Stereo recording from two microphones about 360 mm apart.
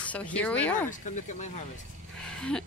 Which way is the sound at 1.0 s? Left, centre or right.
Centre.